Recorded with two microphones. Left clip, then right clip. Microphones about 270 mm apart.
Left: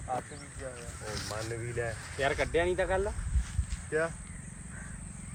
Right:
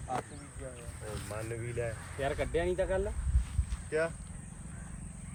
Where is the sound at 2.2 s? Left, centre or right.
Centre.